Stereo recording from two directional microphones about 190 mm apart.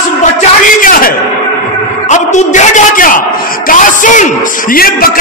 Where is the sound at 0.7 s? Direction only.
45° left (ahead or behind).